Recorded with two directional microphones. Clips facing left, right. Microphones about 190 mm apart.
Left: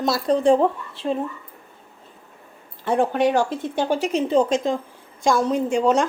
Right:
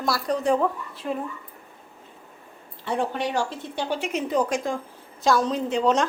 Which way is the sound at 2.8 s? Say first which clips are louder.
Left 7 dB; 50° left (ahead or behind).